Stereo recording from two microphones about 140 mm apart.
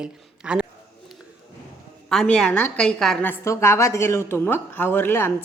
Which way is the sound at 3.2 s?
15° left (ahead or behind).